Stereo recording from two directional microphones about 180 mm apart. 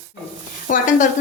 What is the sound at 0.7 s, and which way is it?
Speech, 45° left (ahead or behind).